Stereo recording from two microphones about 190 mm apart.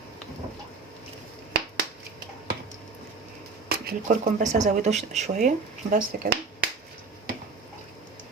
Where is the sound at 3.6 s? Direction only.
55° right (ahead or behind).